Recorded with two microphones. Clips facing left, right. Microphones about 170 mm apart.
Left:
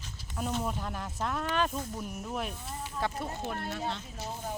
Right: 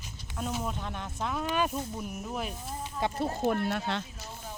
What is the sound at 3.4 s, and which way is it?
Speech, 65° right (ahead or behind).